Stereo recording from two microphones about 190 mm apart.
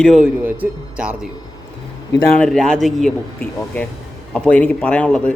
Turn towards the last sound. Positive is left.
turn(degrees=5)  # may be behind; listen again after turning